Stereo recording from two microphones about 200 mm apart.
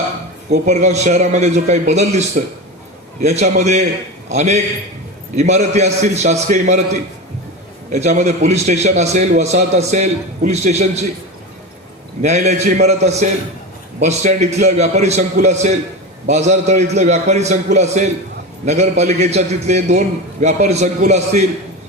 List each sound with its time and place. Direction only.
0.5 s a man's voice: 35° right (ahead or behind)
7.9 s a man's voice: 35° right (ahead or behind)
12.2 s a man's voice: 35° right (ahead or behind)